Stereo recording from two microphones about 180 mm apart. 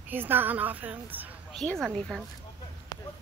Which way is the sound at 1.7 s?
Centre (ahead or behind).